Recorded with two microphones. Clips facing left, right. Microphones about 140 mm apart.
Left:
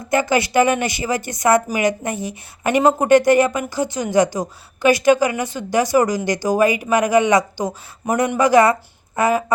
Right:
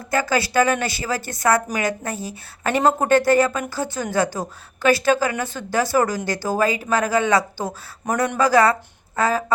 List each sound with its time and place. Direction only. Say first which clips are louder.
0.1 s a woman's voice: left 3 dB; 20° left (ahead or behind)